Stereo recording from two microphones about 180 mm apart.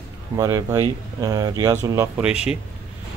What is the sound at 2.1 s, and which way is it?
Mantra, 5° right (ahead or behind).